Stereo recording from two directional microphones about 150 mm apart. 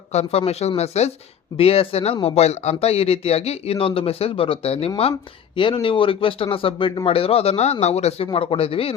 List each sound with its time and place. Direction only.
0.1 s speech: 45° left (ahead or behind)